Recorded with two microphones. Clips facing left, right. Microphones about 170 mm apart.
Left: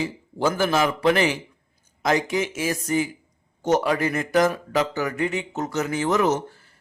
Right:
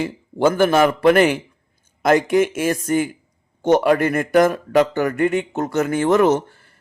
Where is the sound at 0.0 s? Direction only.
55° right (ahead or behind).